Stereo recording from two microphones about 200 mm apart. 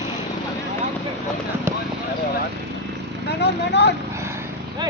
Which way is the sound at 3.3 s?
55° left (ahead or behind).